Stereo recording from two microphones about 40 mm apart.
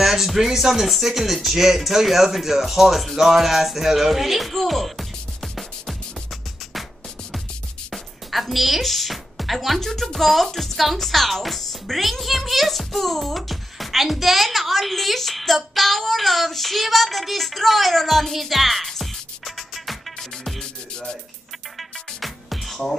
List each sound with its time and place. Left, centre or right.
0.0 s speech: centre
7.9 s music: centre
9.8 s speech: centre
20.9 s music: left
21.7 s music: centre